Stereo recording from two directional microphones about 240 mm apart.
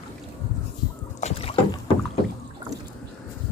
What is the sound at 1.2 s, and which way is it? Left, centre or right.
Boat, left.